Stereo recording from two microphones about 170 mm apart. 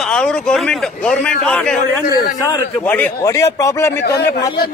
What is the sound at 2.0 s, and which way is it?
Speech, 60° left (ahead or behind).